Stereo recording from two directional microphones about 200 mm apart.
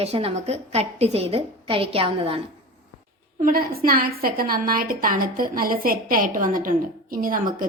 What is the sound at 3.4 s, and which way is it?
A woman's voice, 45° right (ahead or behind).